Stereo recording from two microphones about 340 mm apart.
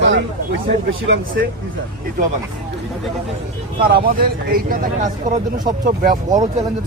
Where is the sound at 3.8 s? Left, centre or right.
Right.